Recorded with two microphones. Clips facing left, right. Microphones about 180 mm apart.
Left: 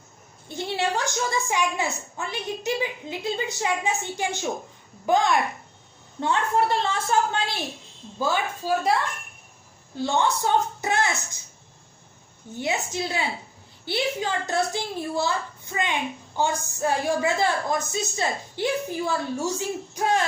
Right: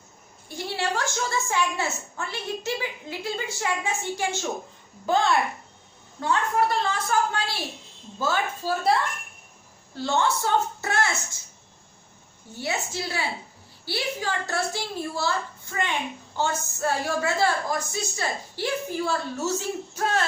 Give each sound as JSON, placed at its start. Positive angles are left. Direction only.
{"t": 0.4, "sound": "a woman's voice", "side_deg": 20}
{"t": 12.5, "sound": "a woman's voice", "side_deg": 20}